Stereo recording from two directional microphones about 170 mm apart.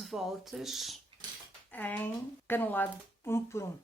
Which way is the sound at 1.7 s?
10° left (ahead or behind).